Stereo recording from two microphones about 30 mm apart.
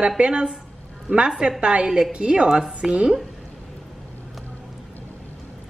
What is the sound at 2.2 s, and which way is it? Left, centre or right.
Speech, right.